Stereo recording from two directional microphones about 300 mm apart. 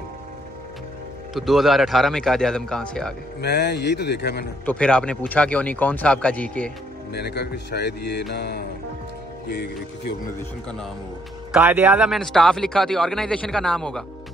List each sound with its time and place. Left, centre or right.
1.3 s speech: centre
3.3 s speech: left
4.6 s speech: centre
7.1 s speech: left
11.5 s speech: centre